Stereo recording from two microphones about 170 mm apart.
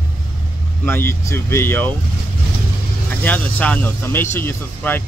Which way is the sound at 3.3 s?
10° left (ahead or behind).